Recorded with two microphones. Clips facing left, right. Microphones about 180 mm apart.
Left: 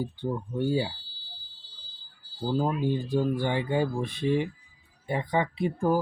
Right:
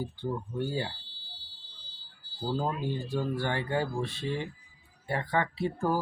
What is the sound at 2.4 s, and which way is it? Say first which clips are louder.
Speech: left 4 dB; 15° left (ahead or behind).